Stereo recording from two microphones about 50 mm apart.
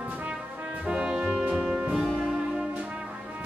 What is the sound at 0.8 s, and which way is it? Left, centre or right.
Music, centre.